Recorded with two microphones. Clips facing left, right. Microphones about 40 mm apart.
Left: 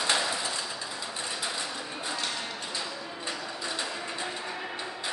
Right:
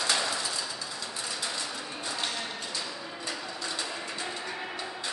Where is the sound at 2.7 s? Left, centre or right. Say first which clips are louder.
Left 1 dB; centre.